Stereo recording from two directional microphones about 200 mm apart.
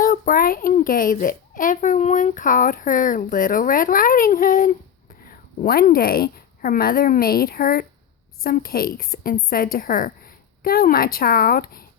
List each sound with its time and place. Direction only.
0.0 s a woman's voice: 45° left (ahead or behind)